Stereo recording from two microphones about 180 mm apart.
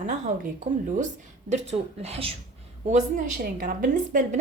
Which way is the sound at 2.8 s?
45° right (ahead or behind).